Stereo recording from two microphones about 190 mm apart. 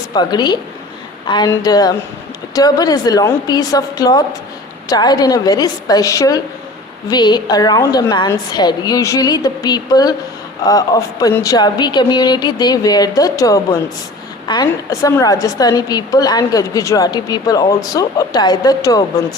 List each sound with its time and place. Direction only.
0.1 s a woman's voice: 25° left (ahead or behind)